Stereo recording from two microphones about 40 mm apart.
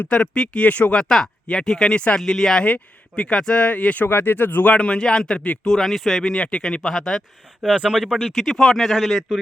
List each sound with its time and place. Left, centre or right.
0.1 s speech: left
0.9 s speech: centre
2.6 s speech: left
4.0 s speech: left
4.6 s speech: left
5.6 s speech: centre
6.2 s speech: centre
7.6 s speech: right
8.0 s speech: centre